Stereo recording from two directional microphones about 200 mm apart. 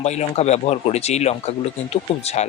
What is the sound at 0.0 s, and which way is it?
Speech, 35° left (ahead or behind).